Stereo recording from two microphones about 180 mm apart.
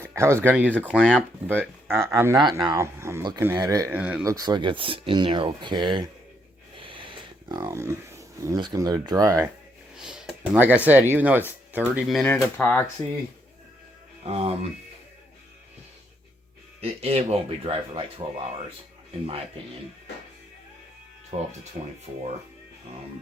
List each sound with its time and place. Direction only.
0.0 s speech: 15° right (ahead or behind)
9.9 s speech: 5° right (ahead or behind)
14.3 s speech: 35° right (ahead or behind)
16.8 s speech: 35° right (ahead or behind)
21.3 s speech: 35° right (ahead or behind)
21.8 s speech: 45° right (ahead or behind)